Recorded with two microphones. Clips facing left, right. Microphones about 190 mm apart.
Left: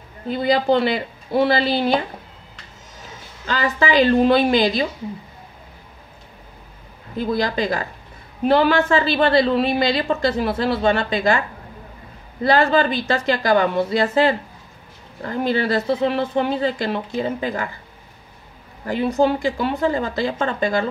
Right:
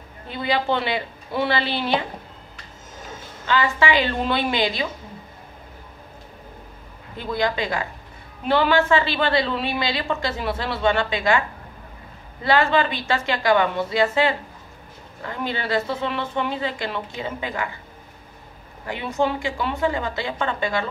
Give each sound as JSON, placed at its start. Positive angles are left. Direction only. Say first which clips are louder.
{"t": 0.3, "sound": "a woman's voice", "louder": "left 6 dB", "side_deg": 40}
{"t": 3.4, "sound": "a woman's voice", "louder": "even", "side_deg": 40}
{"t": 7.2, "sound": "a woman's voice", "louder": "left 3 dB", "side_deg": 35}
{"t": 12.4, "sound": "a woman's voice", "louder": "left 3 dB", "side_deg": 35}
{"t": 18.9, "sound": "a woman's voice", "louder": "left 5 dB", "side_deg": 35}